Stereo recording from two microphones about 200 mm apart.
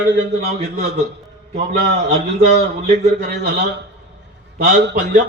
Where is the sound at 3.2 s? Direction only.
55° right (ahead or behind).